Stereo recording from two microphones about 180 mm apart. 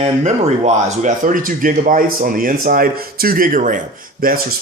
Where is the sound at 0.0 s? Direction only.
40° right (ahead or behind).